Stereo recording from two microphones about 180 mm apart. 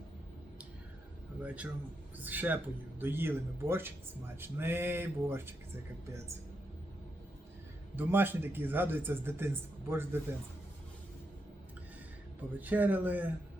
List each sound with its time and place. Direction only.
1.4 s speech: 5° right (ahead or behind)
7.9 s speech: 10° right (ahead or behind)
12.5 s speech: 10° right (ahead or behind)